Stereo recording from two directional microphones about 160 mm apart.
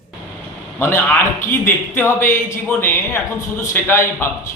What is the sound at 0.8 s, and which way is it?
A man's voice, 15° left (ahead or behind).